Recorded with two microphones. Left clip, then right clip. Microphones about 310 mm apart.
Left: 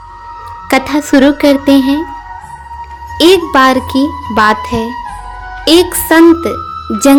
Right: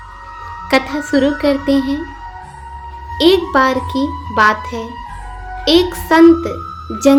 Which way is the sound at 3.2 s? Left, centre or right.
Left.